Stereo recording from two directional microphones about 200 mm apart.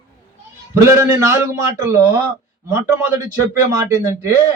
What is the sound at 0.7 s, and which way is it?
A man's voice, 15° right (ahead or behind).